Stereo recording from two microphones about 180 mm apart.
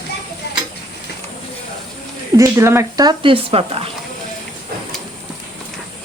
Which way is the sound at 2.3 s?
15° right (ahead or behind).